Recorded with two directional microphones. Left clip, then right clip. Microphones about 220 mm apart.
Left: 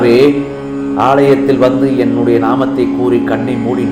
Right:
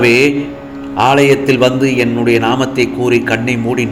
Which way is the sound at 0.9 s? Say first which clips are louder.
Even; 50° right (ahead or behind).